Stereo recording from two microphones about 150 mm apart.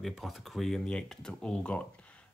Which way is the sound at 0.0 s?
Centre (ahead or behind).